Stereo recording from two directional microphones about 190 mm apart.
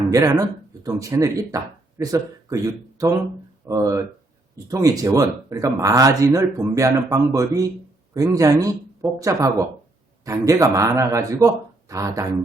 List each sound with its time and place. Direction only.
0.1 s speech: 20° right (ahead or behind)